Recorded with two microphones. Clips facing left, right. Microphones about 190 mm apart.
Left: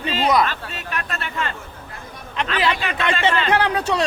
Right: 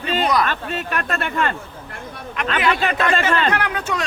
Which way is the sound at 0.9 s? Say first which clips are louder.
Right 4 dB; 50° right (ahead or behind).